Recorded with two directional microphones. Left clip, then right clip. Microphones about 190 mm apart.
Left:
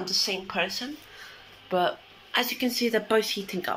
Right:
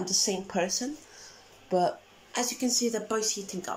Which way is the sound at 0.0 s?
30° right (ahead or behind).